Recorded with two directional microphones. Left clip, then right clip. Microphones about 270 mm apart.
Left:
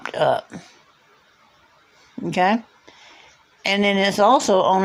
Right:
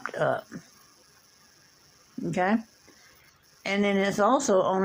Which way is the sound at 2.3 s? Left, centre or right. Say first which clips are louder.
Left 8 dB; left.